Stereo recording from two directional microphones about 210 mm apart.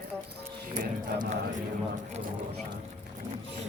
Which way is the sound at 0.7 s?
40° right (ahead or behind).